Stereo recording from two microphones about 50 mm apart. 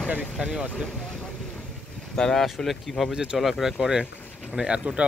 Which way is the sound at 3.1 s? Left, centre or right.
Centre.